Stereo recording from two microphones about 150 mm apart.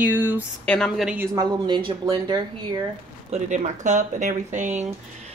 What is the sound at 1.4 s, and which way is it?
Speech, 30° right (ahead or behind).